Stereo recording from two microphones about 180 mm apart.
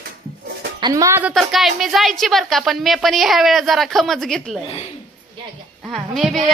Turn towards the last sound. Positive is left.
turn(degrees=0)  # may be behind; listen again after turning